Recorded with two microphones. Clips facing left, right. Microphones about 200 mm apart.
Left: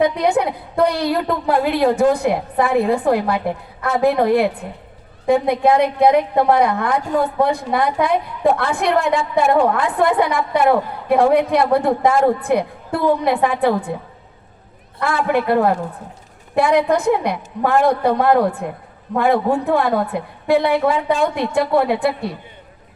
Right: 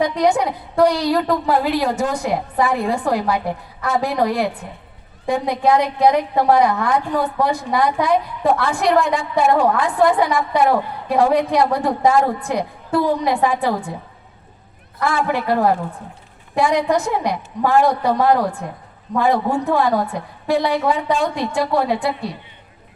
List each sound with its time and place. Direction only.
0.0 s a woman's voice: 55° left (ahead or behind)
15.0 s a woman's voice: 55° left (ahead or behind)